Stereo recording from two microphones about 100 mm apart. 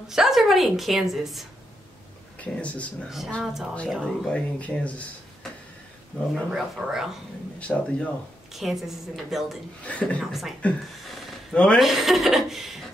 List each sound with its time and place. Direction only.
0.1 s a woman's voice: 5° right (ahead or behind)
2.3 s speech: 15° left (ahead or behind)
6.1 s a woman's voice: centre (ahead or behind)
7.5 s speech: 15° left (ahead or behind)
8.5 s a woman's voice: centre (ahead or behind)
9.8 s speech: 15° left (ahead or behind)
11.0 s a sound: centre (ahead or behind)
11.5 s speech: 10° left (ahead or behind)
11.8 s a woman's voice: centre (ahead or behind)